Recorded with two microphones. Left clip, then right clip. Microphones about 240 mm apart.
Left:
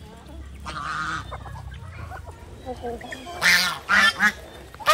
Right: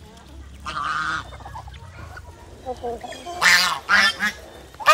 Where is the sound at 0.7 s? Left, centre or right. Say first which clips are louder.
Right 4 dB; centre.